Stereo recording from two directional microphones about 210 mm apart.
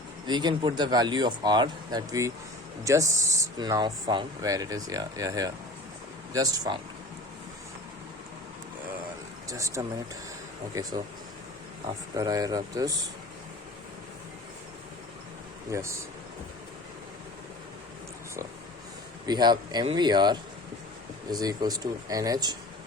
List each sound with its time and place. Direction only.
0.3 s speech: 20° right (ahead or behind)
9.5 s speech: 15° right (ahead or behind)
15.7 s speech: 15° right (ahead or behind)
19.2 s speech: 20° right (ahead or behind)